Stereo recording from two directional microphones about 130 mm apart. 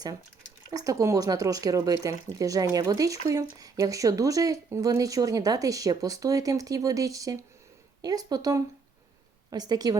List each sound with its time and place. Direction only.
0.7 s a woman's voice: 25° right (ahead or behind)